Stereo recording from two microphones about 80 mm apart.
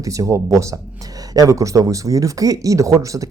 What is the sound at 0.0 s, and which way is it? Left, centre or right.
Speech, right.